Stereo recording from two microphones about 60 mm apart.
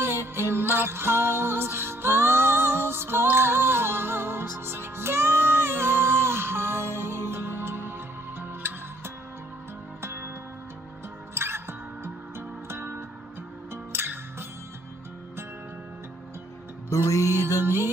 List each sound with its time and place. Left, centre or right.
0.0 s music: right
11.3 s music: right
16.9 s music: left